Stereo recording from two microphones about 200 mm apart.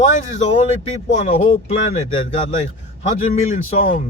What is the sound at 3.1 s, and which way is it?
Speech, 35° left (ahead or behind).